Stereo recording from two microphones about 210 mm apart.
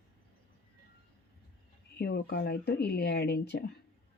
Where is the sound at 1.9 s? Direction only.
50° left (ahead or behind).